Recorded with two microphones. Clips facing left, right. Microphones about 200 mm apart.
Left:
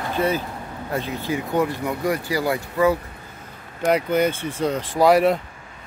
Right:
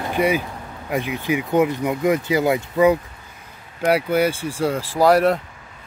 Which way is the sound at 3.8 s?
10° right (ahead or behind).